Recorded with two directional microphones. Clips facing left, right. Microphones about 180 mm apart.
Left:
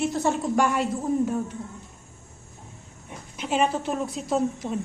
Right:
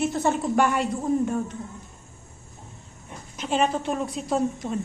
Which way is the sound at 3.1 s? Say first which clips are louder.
Even; 10° left (ahead or behind).